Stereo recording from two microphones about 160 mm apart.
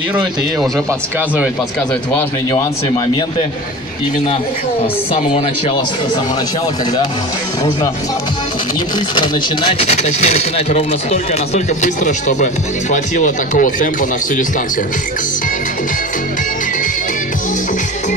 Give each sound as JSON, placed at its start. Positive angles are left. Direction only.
{"t": 5.1, "sound": "speech", "side_deg": 35}
{"t": 9.1, "sound": "speech", "side_deg": 30}